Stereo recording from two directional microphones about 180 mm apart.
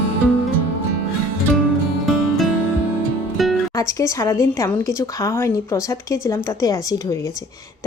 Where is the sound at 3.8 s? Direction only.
20° left (ahead or behind).